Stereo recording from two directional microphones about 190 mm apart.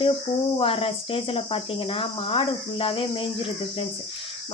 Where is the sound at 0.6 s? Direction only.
30° left (ahead or behind).